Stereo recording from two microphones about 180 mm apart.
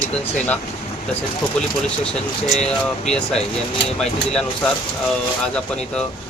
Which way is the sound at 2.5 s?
5° left (ahead or behind).